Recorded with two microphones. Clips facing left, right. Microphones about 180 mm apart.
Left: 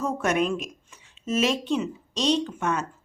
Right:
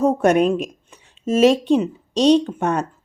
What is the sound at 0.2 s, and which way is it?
Speech, 35° right (ahead or behind).